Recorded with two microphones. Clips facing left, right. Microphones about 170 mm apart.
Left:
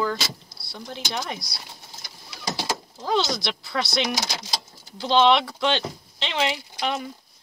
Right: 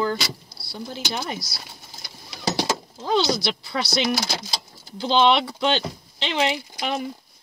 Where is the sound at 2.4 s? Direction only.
75° right (ahead or behind).